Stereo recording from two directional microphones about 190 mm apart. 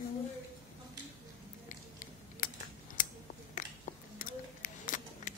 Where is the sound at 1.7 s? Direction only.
45° left (ahead or behind).